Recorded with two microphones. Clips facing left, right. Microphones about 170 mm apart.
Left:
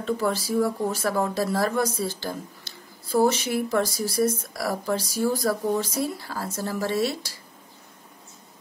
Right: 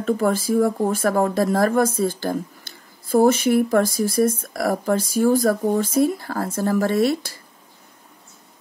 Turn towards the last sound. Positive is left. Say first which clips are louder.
# right 6 dB
turn(degrees=-55)  # may be behind; listen again after turning